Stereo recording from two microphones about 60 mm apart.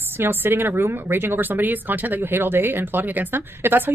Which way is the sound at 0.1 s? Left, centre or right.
Right.